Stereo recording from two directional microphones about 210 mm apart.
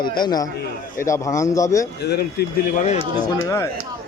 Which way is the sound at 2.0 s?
50° left (ahead or behind).